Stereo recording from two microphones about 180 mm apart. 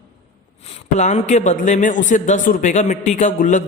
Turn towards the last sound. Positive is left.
turn(degrees=45)  # may be behind; listen again after turning